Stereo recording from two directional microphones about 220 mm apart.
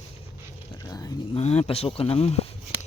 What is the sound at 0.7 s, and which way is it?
Speech, 15° left (ahead or behind).